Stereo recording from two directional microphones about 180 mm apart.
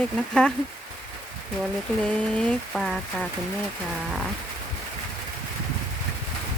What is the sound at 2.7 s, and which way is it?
Speech, centre (ahead or behind).